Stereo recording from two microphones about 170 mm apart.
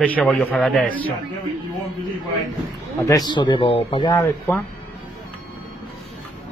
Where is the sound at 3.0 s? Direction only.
20° left (ahead or behind).